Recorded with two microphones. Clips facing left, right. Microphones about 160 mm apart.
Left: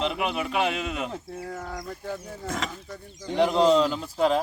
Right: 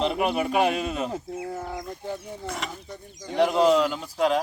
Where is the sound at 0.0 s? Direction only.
40° right (ahead or behind).